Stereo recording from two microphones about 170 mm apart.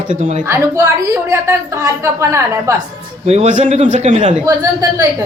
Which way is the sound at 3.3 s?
40° right (ahead or behind).